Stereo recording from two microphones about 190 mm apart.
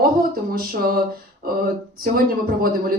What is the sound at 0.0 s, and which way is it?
Speech, 50° right (ahead or behind).